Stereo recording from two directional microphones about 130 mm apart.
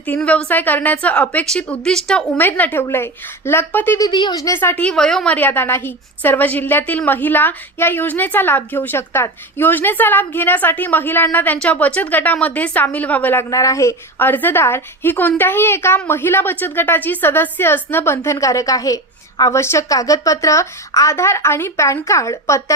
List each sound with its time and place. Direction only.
0.0 s a woman's voice: 10° left (ahead or behind)
4.0 s a woman's voice: 35° left (ahead or behind)